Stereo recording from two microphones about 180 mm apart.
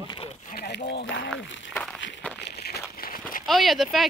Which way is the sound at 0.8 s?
80° left.